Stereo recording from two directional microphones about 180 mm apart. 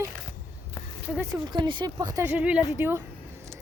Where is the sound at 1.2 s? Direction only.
25° right (ahead or behind).